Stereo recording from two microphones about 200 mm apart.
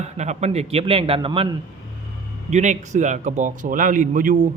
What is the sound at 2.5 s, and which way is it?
A man's voice, 35° right (ahead or behind).